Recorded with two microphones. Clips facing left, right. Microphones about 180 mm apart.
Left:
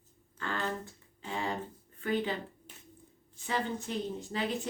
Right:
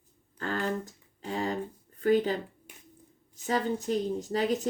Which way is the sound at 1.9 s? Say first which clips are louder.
Right 7 dB; 40° right (ahead or behind).